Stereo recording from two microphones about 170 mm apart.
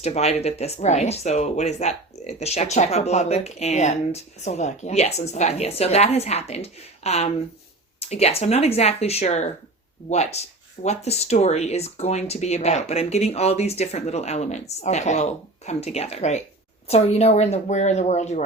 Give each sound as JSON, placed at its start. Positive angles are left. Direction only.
{"t": 0.0, "sound": "speech", "side_deg": 40}